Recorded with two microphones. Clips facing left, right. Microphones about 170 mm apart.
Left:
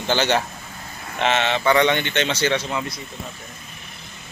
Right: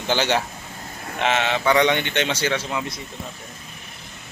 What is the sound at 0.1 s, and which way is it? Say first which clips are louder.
Speech: left 1 dB; 10° right (ahead or behind).